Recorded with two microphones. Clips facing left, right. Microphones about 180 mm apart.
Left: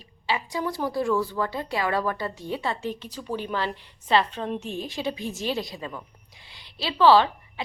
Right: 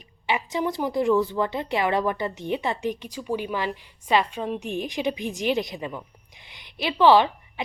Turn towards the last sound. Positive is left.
turn(degrees=-15)  # may be behind; listen again after turning